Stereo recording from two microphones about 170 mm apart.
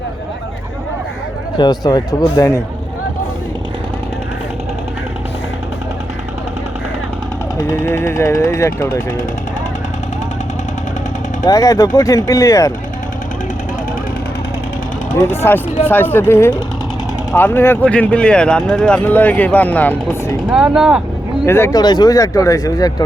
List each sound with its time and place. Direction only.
1.5 s speech: 25° left (ahead or behind)
7.8 s speech: 15° left (ahead or behind)
11.4 s speech: 20° left (ahead or behind)
15.2 s speech: 15° left (ahead or behind)
20.5 s speech: 5° right (ahead or behind)
21.4 s speech: 15° left (ahead or behind)